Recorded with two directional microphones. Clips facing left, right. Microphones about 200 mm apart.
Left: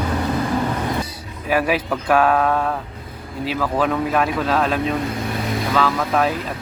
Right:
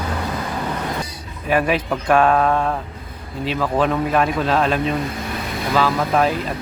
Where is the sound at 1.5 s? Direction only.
5° left (ahead or behind).